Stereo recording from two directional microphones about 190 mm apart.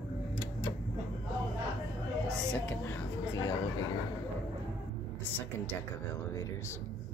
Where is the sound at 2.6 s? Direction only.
15° left (ahead or behind).